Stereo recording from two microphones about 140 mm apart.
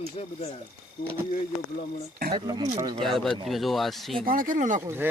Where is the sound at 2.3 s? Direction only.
30° right (ahead or behind).